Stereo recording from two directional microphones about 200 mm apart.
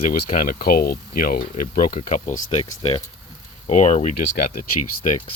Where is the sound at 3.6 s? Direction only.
35° left (ahead or behind).